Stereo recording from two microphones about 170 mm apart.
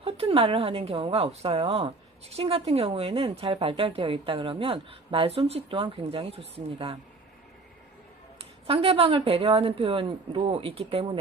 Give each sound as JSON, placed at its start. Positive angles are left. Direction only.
{"t": 0.0, "sound": "speech", "side_deg": -35}
{"t": 8.6, "sound": "speech", "side_deg": -35}